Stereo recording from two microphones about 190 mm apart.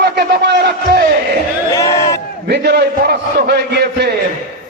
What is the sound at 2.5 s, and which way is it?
A man's voice, 60° right (ahead or behind).